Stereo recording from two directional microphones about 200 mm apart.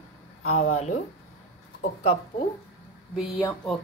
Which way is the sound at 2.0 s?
30° left (ahead or behind).